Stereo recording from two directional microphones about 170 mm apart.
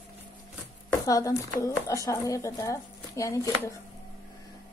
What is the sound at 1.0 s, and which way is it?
Speech, 20° left (ahead or behind).